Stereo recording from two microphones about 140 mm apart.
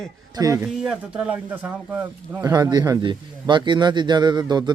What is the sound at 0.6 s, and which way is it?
Speech, 5° right (ahead or behind).